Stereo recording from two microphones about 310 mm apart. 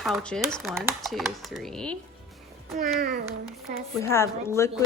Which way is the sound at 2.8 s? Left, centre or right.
Right.